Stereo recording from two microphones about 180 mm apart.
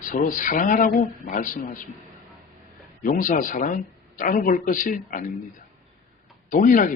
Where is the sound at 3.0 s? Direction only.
50° left (ahead or behind).